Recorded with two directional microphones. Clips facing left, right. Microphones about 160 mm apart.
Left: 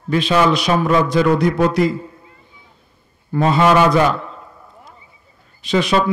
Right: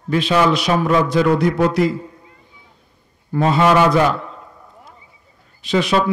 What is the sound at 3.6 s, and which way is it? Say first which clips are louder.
Speech: left 1 dB; 25° right (ahead or behind).